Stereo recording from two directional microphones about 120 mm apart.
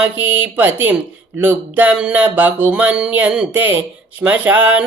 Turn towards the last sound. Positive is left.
turn(degrees=-15)  # may be behind; listen again after turning